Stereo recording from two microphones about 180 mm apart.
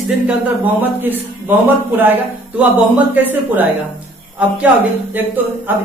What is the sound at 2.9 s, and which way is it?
Speech, 10° right (ahead or behind).